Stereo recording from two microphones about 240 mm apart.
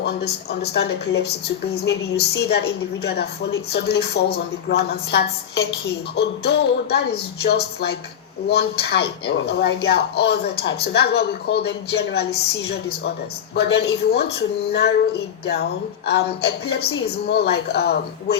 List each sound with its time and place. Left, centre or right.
0.0 s speech: left
16.0 s speech: left